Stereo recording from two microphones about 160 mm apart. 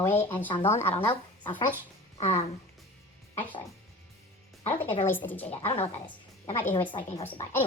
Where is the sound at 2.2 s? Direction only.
40° left (ahead or behind).